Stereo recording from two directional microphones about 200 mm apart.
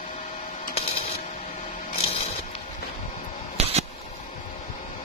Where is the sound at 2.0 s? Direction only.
30° left (ahead or behind).